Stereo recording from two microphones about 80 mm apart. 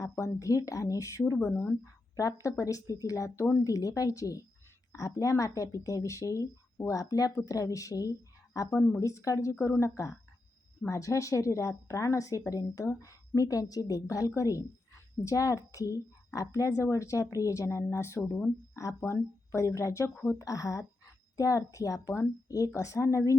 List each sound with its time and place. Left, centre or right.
0.0 s a woman's voice: left
18.3 s speech: centre
18.8 s a woman's voice: left